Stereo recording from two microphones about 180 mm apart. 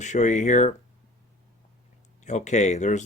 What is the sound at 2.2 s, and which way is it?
Speech, 40° left (ahead or behind).